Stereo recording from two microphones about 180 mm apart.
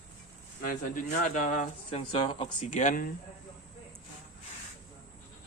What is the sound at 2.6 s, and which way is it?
Speech, 45° left (ahead or behind).